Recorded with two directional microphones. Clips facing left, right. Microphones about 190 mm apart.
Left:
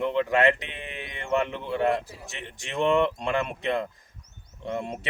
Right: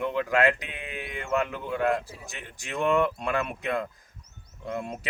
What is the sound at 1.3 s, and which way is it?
Speech, 30° left (ahead or behind).